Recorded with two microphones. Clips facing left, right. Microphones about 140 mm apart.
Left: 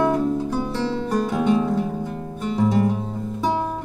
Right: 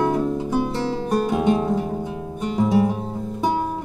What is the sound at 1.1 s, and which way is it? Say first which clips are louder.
Music: right 1 dB; 15° right (ahead or behind).